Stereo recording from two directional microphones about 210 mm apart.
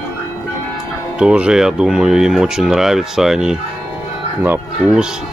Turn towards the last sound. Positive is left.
turn(degrees=-5)  # may be behind; listen again after turning